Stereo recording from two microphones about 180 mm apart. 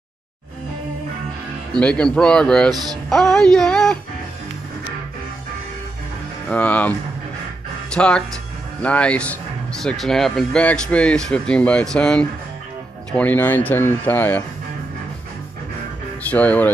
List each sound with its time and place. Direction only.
1.7 s speech: 5° left (ahead or behind)
2.7 s speech: 20° right (ahead or behind)
3.1 s music: centre (ahead or behind)
6.5 s speech: 10° left (ahead or behind)
16.3 s speech: 10° left (ahead or behind)